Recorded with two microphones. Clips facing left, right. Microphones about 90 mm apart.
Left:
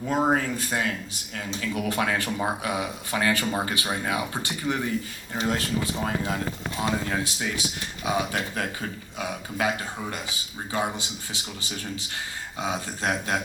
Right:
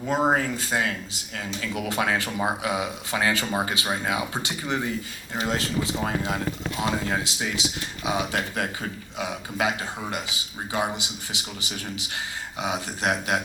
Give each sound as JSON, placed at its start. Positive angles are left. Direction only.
{"t": 0.1, "sound": "speech", "side_deg": -20}